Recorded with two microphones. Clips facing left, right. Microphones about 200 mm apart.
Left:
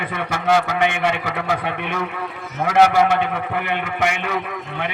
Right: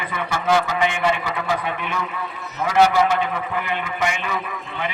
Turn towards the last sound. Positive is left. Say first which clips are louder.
# left 2 dB
turn(degrees=60)  # may be behind; listen again after turning